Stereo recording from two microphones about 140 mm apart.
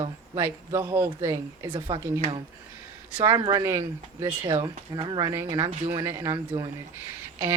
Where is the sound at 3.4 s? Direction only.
25° right (ahead or behind).